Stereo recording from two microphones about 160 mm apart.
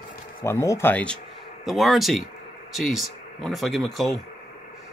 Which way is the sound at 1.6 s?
Centre (ahead or behind).